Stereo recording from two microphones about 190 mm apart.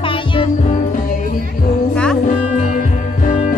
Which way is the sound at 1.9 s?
5° left (ahead or behind).